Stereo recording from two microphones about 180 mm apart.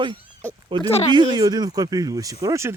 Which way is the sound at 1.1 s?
25° right (ahead or behind).